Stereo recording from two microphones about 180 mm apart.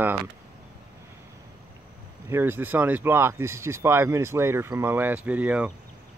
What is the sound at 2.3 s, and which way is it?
Speech, 10° right (ahead or behind).